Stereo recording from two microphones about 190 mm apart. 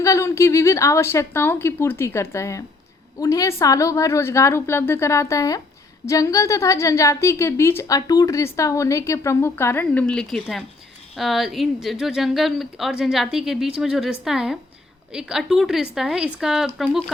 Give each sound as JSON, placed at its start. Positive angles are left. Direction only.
{"t": 0.0, "sound": "speech", "side_deg": 15}